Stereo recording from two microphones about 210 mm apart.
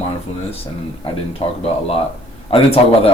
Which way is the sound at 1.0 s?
30° left (ahead or behind).